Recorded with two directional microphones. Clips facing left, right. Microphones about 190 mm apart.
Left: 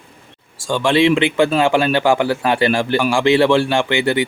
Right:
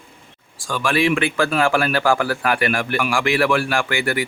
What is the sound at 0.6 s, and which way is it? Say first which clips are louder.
Speech: left 5 dB; 25° left (ahead or behind).